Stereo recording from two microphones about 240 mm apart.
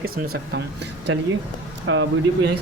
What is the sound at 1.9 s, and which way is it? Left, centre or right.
Speech, right.